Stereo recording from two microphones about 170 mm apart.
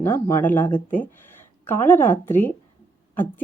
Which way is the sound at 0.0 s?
10° left (ahead or behind).